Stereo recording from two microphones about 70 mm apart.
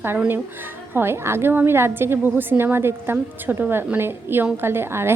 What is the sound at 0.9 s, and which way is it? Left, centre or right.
A woman's voice, right.